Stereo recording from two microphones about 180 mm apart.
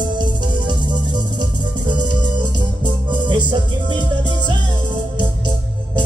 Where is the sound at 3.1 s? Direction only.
25° right (ahead or behind).